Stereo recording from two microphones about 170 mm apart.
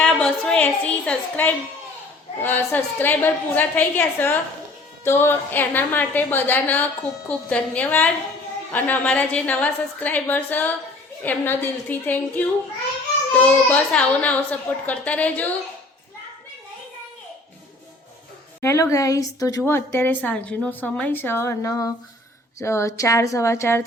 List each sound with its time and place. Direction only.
0.0 s a woman's voice: 5° left (ahead or behind)
18.6 s a woman's voice: 15° left (ahead or behind)